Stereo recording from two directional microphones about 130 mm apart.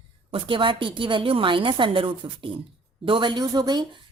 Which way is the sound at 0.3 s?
40° right (ahead or behind).